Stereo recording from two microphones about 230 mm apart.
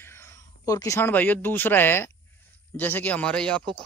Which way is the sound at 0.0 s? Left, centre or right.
Centre.